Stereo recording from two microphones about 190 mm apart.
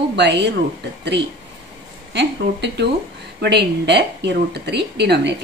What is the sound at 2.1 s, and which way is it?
A woman's voice, 65° right (ahead or behind).